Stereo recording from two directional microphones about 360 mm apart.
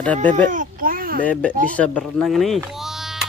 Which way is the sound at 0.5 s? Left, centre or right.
Right.